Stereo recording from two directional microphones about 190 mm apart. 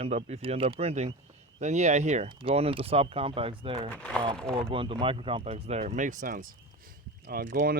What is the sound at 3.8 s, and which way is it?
Speech, 5° left (ahead or behind).